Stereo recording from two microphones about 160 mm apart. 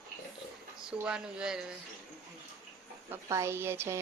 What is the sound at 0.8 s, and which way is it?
Speech, 5° right (ahead or behind).